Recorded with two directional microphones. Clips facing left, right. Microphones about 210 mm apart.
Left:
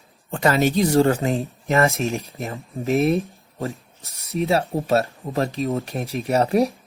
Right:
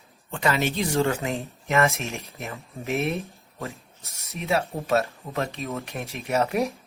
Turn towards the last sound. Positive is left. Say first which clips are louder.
# left 5 dB
turn(degrees=35)  # may be behind; listen again after turning